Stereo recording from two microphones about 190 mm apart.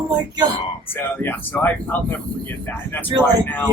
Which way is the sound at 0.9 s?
10° left (ahead or behind).